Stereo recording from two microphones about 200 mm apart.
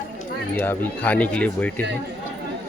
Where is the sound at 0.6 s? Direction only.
10° left (ahead or behind).